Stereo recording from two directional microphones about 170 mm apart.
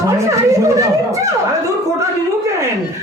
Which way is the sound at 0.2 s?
20° right (ahead or behind).